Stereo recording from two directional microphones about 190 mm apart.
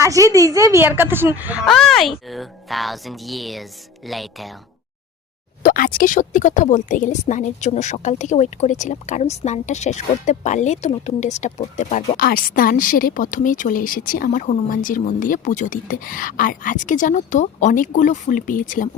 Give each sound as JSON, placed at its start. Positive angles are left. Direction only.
{"t": 0.0, "sound": "speech", "side_deg": -15}
{"t": 5.6, "sound": "speech", "side_deg": 50}